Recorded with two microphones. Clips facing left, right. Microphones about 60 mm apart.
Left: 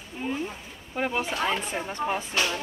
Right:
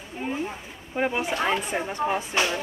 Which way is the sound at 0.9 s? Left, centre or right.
Centre.